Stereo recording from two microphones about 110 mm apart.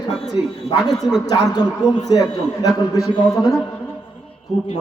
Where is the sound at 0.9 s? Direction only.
5° left (ahead or behind).